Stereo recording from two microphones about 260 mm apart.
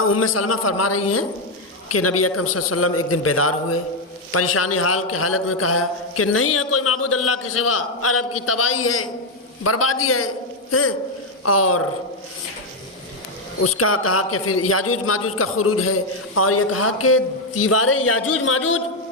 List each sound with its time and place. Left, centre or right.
0.1 s a man's voice: left
13.6 s a man's voice: left